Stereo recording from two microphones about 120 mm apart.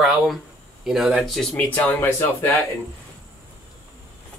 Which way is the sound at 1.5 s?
15° left (ahead or behind).